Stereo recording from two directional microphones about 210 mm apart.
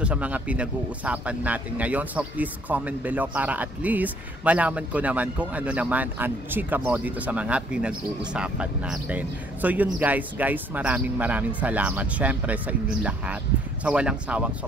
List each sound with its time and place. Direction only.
0.0 s speech: 5° right (ahead or behind)